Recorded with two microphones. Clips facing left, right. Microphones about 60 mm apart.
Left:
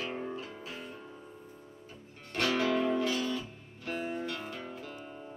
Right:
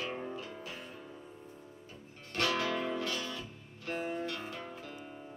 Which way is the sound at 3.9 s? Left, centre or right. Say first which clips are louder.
Left 1 dB; centre.